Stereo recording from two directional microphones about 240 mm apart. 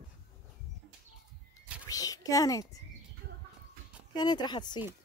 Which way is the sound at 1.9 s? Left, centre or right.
Centre.